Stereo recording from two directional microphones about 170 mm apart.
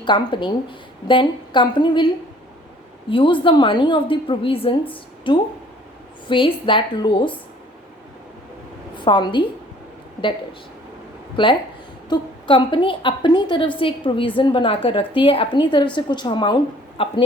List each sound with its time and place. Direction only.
0.0 s a woman's voice: 25° left (ahead or behind)
3.1 s a woman's voice: 30° left (ahead or behind)
9.0 s a woman's voice: 25° left (ahead or behind)
11.4 s a woman's voice: 30° left (ahead or behind)